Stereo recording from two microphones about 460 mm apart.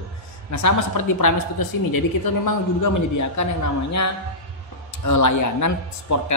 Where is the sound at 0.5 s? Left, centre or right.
Left.